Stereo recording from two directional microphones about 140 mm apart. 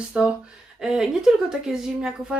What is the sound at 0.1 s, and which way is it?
Speech, 5° right (ahead or behind).